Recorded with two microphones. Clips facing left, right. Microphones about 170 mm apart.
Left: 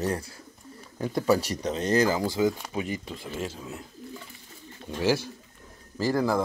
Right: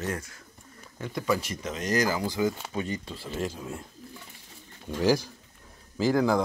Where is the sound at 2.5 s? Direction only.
5° left (ahead or behind).